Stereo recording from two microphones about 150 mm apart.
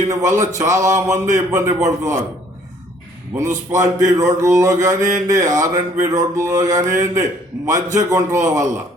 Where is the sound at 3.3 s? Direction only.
5° right (ahead or behind).